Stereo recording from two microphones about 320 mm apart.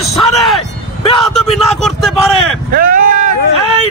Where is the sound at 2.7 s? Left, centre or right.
Right.